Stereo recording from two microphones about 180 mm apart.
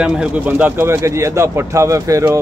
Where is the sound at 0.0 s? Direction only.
5° right (ahead or behind).